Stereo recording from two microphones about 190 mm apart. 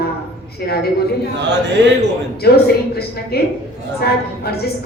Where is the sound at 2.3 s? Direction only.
55° left (ahead or behind).